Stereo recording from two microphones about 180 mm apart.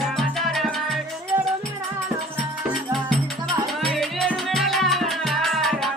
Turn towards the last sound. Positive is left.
turn(degrees=0)  # may be behind; listen again after turning